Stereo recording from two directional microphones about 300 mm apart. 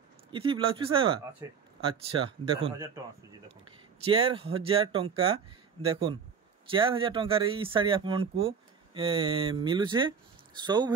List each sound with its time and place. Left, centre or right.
0.3 s speech: centre